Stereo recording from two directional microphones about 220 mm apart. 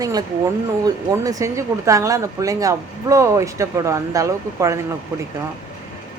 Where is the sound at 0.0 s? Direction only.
15° right (ahead or behind).